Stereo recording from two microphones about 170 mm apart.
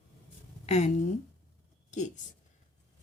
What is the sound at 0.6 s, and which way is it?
Speech, 40° left (ahead or behind).